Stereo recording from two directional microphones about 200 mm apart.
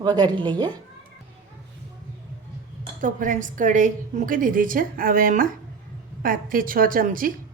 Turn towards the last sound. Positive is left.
turn(degrees=-45)  # may be behind; listen again after turning